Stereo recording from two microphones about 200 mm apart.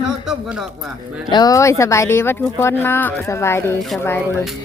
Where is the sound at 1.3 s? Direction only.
20° left (ahead or behind).